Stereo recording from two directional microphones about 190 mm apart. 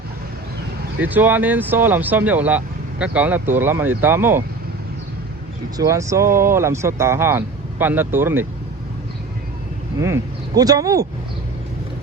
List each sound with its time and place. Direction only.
0.9 s speech: 10° right (ahead or behind)
5.7 s speech: 15° right (ahead or behind)
10.0 s speech: 15° right (ahead or behind)